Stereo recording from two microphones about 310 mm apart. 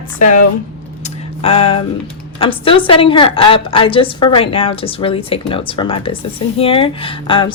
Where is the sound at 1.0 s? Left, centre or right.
Centre.